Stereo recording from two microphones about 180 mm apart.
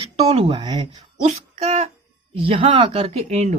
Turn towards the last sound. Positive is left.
turn(degrees=-40)  # may be behind; listen again after turning